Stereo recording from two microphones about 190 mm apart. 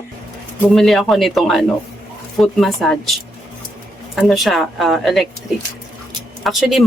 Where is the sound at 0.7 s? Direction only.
Centre (ahead or behind).